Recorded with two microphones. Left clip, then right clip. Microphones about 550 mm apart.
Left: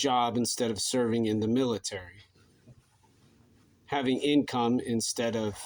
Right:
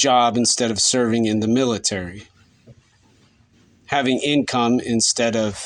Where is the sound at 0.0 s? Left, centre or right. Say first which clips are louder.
Right 11 dB; centre.